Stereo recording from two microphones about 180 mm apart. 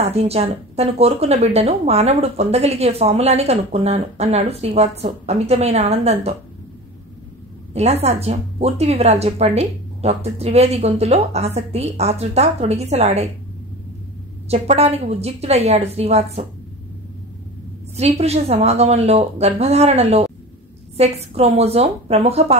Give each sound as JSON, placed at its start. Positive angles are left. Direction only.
{"t": 0.0, "sound": "a woman's voice", "side_deg": -35}
{"t": 7.7, "sound": "a woman's voice", "side_deg": -35}
{"t": 14.5, "sound": "a woman's voice", "side_deg": -35}
{"t": 17.9, "sound": "a woman's voice", "side_deg": -35}